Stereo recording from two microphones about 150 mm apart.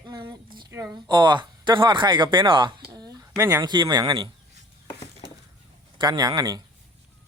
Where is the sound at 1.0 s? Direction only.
30° right (ahead or behind).